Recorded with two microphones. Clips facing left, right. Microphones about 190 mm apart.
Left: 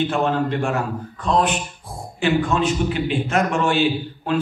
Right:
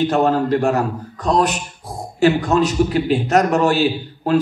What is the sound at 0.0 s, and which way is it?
A man's voice, 40° right (ahead or behind).